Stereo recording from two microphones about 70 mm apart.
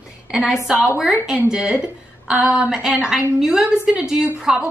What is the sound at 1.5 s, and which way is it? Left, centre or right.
A woman's voice, centre.